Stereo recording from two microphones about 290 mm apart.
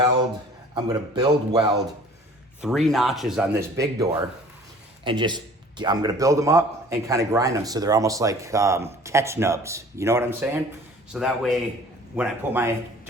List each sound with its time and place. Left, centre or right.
0.7 s a man's voice: centre
2.6 s a man's voice: centre